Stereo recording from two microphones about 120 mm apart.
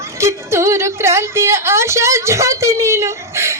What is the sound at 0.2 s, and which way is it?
A woman's voice, 25° right (ahead or behind).